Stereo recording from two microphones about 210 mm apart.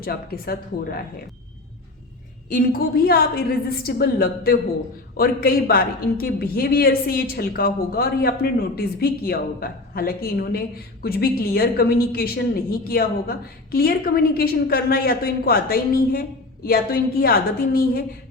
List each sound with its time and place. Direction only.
0.0 s a woman's voice: 45° left (ahead or behind)
2.5 s a woman's voice: 45° left (ahead or behind)